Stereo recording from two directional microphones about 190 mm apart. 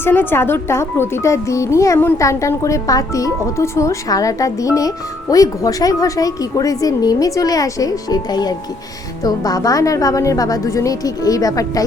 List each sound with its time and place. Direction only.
0.0 s a woman's voice: 10° left (ahead or behind)